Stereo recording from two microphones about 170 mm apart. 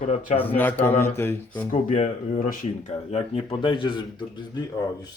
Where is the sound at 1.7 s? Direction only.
45° left (ahead or behind); by 4.6 s 25° left (ahead or behind).